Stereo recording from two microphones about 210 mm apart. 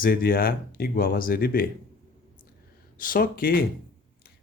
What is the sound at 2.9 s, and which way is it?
Speech, 40° left (ahead or behind).